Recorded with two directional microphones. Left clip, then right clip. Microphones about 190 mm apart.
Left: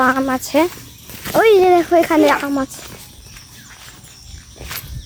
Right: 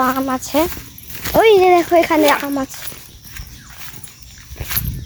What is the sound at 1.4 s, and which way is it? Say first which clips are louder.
Speech: right 1 dB; 5° right (ahead or behind).